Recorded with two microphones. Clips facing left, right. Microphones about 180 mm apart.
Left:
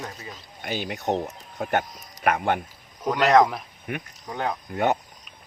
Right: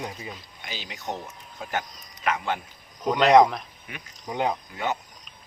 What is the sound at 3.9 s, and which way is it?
Speech, 55° left (ahead or behind).